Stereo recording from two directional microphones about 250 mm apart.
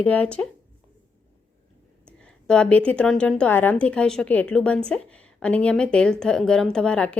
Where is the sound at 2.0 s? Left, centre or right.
Centre.